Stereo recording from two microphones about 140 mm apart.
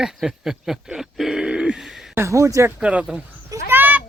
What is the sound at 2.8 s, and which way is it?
Speech, 10° right (ahead or behind).